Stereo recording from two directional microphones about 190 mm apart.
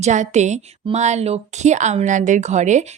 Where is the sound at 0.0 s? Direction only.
40° right (ahead or behind).